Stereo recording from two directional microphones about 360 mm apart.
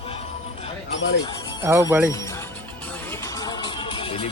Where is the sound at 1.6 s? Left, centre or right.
Centre.